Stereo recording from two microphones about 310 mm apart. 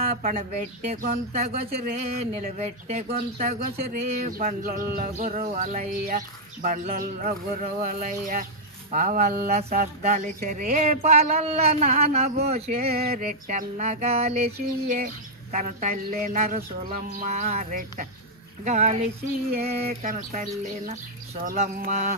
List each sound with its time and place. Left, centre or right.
0.0 s speech: right